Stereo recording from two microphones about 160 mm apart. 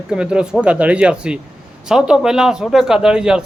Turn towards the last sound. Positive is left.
turn(degrees=-5)  # may be behind; listen again after turning